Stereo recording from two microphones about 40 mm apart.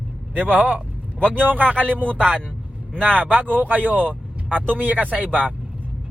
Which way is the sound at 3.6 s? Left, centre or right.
Right.